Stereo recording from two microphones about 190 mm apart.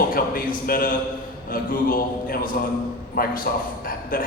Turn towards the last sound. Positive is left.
turn(degrees=45)  # may be behind; listen again after turning